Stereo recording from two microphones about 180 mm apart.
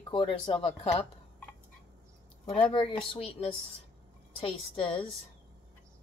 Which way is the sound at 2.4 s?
30° left (ahead or behind).